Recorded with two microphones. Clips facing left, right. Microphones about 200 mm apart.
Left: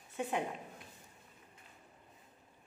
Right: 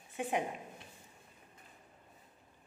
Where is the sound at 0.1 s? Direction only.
15° right (ahead or behind).